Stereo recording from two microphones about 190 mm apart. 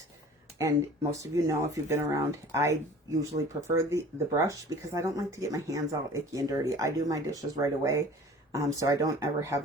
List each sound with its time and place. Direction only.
1.2 s speech: 15° right (ahead or behind)